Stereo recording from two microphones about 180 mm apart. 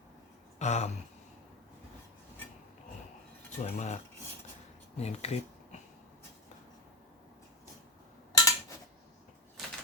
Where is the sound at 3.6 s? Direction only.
40° left (ahead or behind).